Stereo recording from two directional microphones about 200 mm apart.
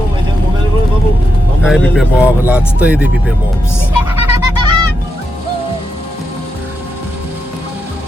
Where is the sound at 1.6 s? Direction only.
5° right (ahead or behind).